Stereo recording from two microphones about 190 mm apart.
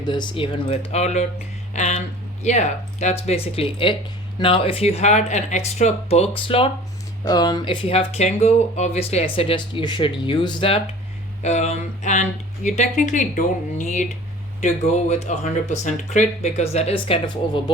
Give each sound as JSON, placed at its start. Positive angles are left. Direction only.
{"t": 0.0, "sound": "speech", "side_deg": 25}